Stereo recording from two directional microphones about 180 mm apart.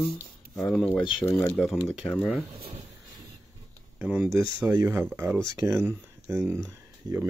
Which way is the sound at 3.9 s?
10° right (ahead or behind).